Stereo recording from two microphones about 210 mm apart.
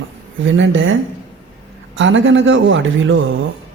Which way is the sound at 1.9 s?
65° right (ahead or behind).